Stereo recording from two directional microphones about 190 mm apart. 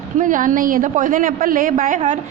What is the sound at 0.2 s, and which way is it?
A woman's voice, 45° right (ahead or behind).